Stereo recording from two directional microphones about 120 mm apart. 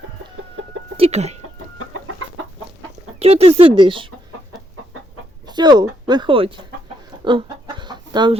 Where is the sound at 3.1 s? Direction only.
55° right (ahead or behind).